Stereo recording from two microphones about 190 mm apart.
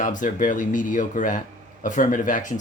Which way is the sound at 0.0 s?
45° left (ahead or behind).